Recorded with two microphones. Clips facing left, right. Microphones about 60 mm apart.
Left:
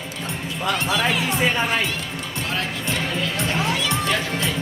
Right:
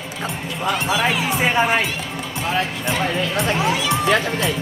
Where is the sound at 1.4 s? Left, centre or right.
Centre.